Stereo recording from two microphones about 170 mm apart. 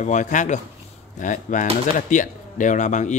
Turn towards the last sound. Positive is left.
turn(degrees=45)  # may be behind; listen again after turning